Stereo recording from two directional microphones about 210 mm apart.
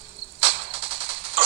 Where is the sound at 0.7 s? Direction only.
25° right (ahead or behind).